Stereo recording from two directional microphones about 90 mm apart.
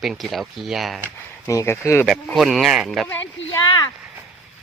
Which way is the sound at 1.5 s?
35° left (ahead or behind).